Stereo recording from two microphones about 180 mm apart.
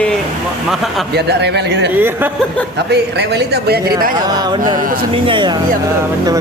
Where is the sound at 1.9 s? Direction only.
10° right (ahead or behind).